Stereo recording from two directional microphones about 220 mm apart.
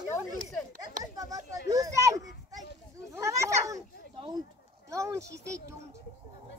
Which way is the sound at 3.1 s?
15° right (ahead or behind).